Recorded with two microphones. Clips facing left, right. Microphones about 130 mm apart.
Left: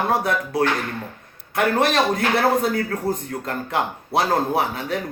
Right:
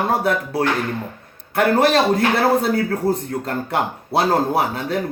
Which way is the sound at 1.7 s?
30° right (ahead or behind).